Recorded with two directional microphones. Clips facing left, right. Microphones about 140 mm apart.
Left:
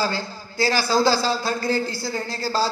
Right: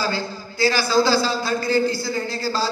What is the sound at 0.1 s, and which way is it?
A man's voice, 40° left (ahead or behind).